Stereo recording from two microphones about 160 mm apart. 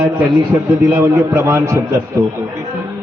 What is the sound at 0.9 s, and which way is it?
Speech, 15° right (ahead or behind).